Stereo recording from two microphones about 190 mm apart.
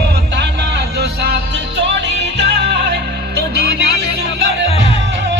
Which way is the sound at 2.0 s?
65° right (ahead or behind).